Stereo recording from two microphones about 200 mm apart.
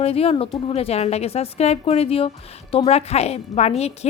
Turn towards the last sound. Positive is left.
turn(degrees=30)  # may be behind; listen again after turning